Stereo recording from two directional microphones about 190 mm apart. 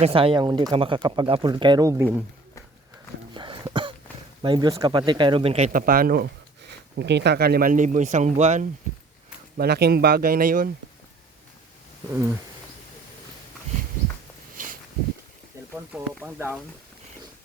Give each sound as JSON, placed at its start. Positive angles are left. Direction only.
{"t": 0.0, "sound": "speech", "side_deg": -30}
{"t": 3.3, "sound": "a sound", "side_deg": -25}
{"t": 4.4, "sound": "speech", "side_deg": -25}
{"t": 9.6, "sound": "speech", "side_deg": -55}
{"t": 14.5, "sound": "a sound", "side_deg": -45}
{"t": 15.7, "sound": "speech", "side_deg": -10}